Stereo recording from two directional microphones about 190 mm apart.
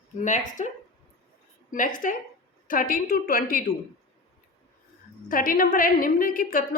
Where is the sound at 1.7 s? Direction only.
45° left (ahead or behind).